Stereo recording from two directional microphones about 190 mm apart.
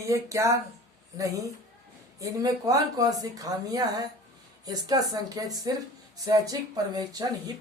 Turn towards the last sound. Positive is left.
turn(degrees=-20)  # may be behind; listen again after turning